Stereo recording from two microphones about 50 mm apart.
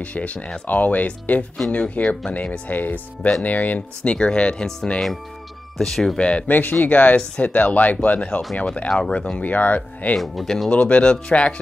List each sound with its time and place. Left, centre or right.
0.0 s speech: left
5.8 s speech: centre
6.1 s speech: left
6.5 s speech: left; by 9.4 s centre
9.4 s speech: left
10.1 s speech: centre
10.7 s speech: left